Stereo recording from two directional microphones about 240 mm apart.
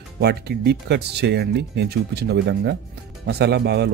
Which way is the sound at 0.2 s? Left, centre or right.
Right.